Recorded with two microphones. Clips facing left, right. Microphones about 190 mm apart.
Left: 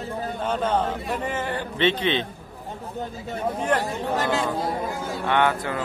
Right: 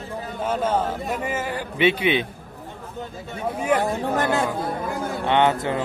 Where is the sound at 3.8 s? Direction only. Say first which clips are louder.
Right 3 dB; 55° right (ahead or behind).